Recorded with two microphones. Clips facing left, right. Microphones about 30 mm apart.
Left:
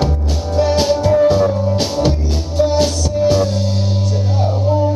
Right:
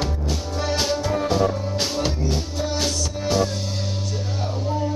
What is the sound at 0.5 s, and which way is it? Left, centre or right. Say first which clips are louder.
Music: left 12 dB; left.